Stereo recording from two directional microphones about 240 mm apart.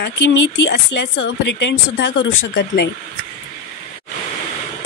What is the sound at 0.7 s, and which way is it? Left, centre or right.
A woman's voice, left.